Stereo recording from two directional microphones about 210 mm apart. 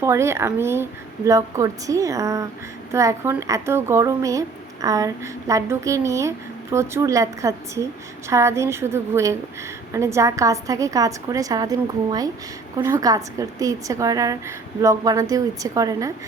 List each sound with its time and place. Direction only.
0.0 s speech: 15° right (ahead or behind)